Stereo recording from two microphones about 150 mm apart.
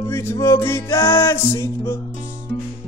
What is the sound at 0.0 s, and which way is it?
Music, 20° left (ahead or behind).